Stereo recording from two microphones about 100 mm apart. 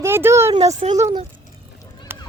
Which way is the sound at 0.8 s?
90° right.